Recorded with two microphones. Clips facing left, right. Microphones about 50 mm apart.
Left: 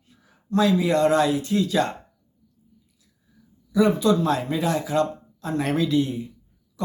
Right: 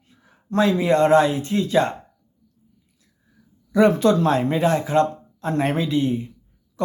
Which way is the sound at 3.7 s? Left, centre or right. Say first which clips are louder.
Right 3 dB; right.